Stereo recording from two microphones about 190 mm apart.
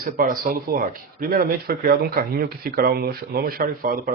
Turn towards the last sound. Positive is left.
turn(degrees=-50)  # may be behind; listen again after turning